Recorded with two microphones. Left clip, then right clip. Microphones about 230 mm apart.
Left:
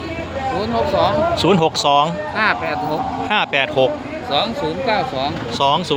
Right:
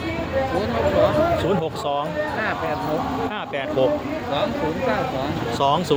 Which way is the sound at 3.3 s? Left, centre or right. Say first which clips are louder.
Left 9 dB; centre.